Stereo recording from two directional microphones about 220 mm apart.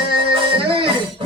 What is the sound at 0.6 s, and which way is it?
Music, 25° right (ahead or behind).